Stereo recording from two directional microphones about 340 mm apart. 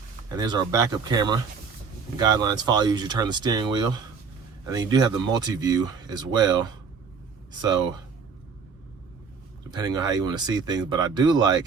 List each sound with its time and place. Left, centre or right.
0.3 s speech: centre
9.7 s speech: centre